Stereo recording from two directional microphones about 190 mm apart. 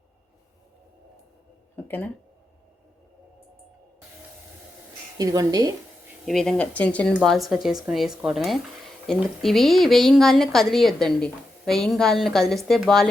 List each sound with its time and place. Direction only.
1.7 s a sound: 10° left (ahead or behind)
5.1 s a woman's voice: 20° right (ahead or behind)
6.2 s speech: 5° left (ahead or behind)